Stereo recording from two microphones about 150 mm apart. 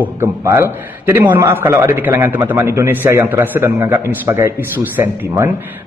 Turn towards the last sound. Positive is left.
turn(degrees=-15)  # may be behind; listen again after turning